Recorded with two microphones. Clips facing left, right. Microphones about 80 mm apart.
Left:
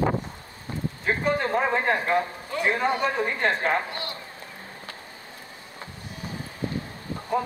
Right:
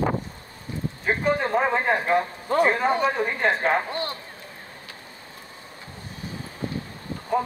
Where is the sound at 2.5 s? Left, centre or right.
Right.